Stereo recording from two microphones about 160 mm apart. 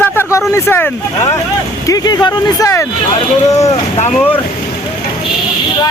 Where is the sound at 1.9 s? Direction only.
25° left (ahead or behind).